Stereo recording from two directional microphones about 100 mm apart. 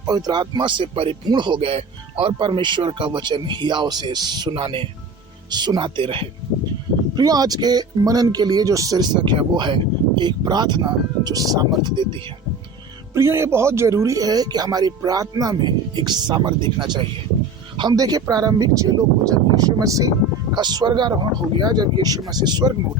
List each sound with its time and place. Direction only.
0.0 s speech: 40° right (ahead or behind)
4.5 s speech: 60° right (ahead or behind)
5.5 s speech: 45° right (ahead or behind)
7.2 s speech: 40° right (ahead or behind)
13.1 s speech: 25° right (ahead or behind); by 22.7 s 45° right (ahead or behind)